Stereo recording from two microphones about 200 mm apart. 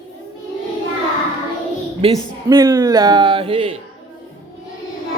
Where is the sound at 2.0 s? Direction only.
20° right (ahead or behind).